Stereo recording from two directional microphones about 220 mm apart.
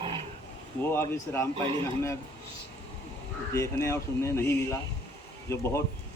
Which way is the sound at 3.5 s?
15° left (ahead or behind).